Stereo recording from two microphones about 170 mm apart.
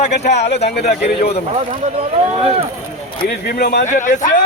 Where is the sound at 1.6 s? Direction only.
35° right (ahead or behind).